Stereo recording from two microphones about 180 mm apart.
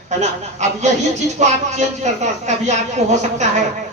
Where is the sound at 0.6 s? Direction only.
40° right (ahead or behind).